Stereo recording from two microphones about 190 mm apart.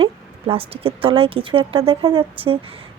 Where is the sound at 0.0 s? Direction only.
30° right (ahead or behind).